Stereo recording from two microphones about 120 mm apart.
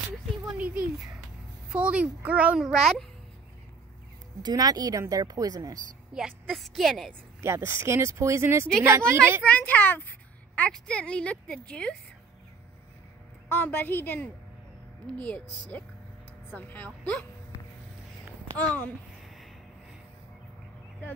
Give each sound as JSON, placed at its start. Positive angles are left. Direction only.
{"t": 1.7, "sound": "a child's voice", "side_deg": -10}
{"t": 4.4, "sound": "speech", "side_deg": -35}
{"t": 6.4, "sound": "a woman's voice", "side_deg": 0}
{"t": 7.4, "sound": "speech", "side_deg": -20}
{"t": 9.4, "sound": "a woman's voice", "side_deg": 15}
{"t": 13.5, "sound": "a woman's voice", "side_deg": 15}
{"t": 16.5, "sound": "a woman's voice", "side_deg": 15}
{"t": 18.6, "sound": "a woman's voice", "side_deg": 10}